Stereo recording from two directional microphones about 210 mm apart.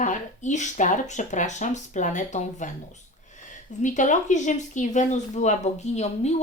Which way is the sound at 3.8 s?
35° left (ahead or behind).